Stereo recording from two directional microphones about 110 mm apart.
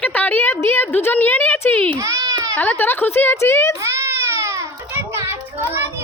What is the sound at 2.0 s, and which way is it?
Baby cry, 30° right (ahead or behind).